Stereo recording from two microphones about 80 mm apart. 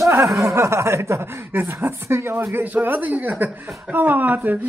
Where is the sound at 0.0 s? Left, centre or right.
Right.